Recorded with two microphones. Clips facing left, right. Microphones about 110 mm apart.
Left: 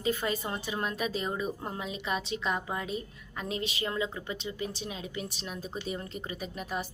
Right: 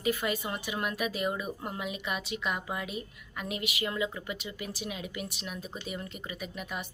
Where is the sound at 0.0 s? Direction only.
30° left (ahead or behind).